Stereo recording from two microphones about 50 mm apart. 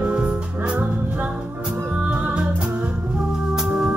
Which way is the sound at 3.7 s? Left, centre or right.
Centre.